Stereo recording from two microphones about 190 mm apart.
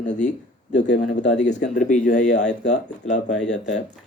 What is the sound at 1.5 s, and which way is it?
Speech, 40° left (ahead or behind).